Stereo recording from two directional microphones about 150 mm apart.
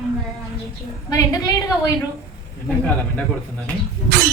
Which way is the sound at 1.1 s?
25° left (ahead or behind).